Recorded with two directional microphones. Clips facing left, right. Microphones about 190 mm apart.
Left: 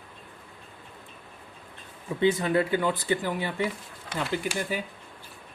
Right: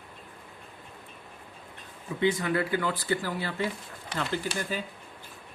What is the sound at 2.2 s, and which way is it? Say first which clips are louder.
Speech: left 3 dB; 25° left (ahead or behind).